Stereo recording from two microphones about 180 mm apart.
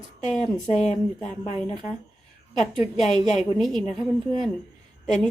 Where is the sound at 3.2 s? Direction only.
Centre (ahead or behind).